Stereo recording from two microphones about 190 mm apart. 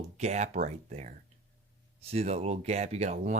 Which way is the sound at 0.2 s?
35° right (ahead or behind).